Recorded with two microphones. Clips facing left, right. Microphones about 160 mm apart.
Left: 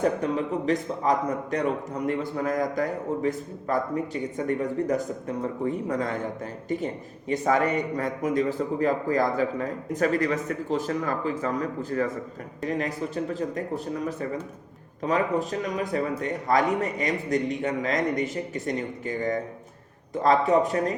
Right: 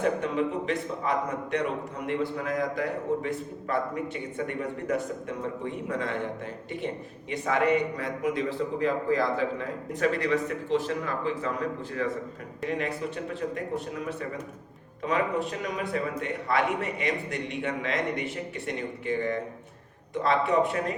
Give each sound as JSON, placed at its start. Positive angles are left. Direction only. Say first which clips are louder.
{"t": 0.0, "sound": "a man's voice", "louder": "left 1 dB", "side_deg": 40}